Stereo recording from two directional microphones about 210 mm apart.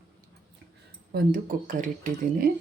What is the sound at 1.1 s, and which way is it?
Speech, 45° right (ahead or behind).